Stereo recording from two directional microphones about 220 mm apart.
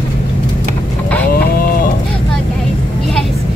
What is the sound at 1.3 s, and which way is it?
Cattle, 40° left (ahead or behind).